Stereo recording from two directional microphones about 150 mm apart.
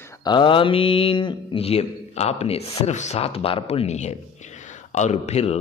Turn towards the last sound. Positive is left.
turn(degrees=45)  # may be behind; listen again after turning